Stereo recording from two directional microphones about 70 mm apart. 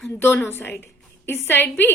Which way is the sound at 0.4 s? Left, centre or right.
Left.